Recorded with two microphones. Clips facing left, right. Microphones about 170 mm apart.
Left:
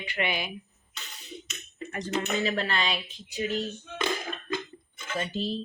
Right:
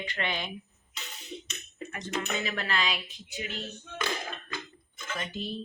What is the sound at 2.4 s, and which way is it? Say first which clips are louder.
Dishes: left 3 dB; 30° left (ahead or behind).